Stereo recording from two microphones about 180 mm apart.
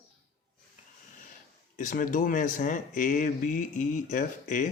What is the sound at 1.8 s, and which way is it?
Speech, 45° left (ahead or behind).